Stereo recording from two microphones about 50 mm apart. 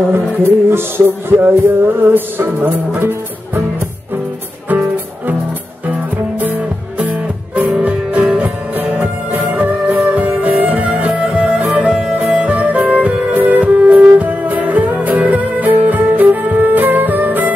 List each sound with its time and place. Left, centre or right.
0.1 s music: right
4.6 s music: right
7.8 s music: right